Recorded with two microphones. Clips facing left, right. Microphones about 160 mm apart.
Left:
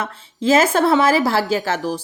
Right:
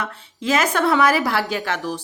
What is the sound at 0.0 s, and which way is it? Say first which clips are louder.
A woman's voice: left 5 dB; 30° left (ahead or behind).